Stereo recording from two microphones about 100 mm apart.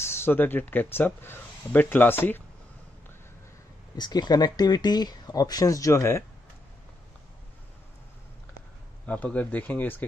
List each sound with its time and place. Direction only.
0.0 s speech: 25° left (ahead or behind)
3.9 s speech: 45° left (ahead or behind)
9.0 s speech: 15° left (ahead or behind)